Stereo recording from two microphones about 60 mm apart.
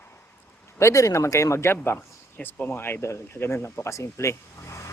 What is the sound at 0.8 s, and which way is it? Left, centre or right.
Speech, left.